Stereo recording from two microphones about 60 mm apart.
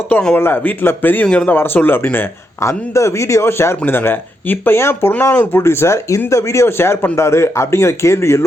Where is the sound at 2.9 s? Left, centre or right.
Left.